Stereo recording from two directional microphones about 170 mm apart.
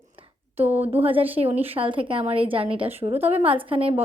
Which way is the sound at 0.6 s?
10° right (ahead or behind).